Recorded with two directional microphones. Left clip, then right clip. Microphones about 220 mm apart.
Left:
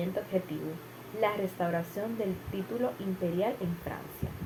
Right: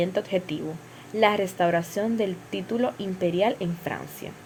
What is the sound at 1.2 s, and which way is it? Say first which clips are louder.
Speech: right 9 dB; 50° right (ahead or behind).